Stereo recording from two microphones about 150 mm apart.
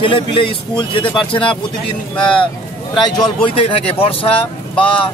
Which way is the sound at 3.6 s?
35° left (ahead or behind).